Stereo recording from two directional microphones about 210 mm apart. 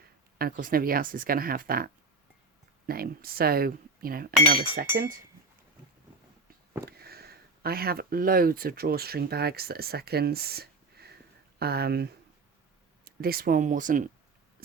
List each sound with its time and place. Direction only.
0.3 s speech: 45° right (ahead or behind)
6.8 s speech: 45° right (ahead or behind)